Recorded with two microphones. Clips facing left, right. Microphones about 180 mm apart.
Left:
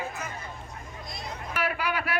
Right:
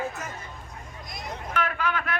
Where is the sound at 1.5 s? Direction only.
10° left (ahead or behind).